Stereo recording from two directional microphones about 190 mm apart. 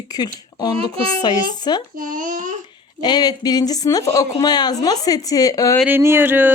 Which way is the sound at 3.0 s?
20° left (ahead or behind).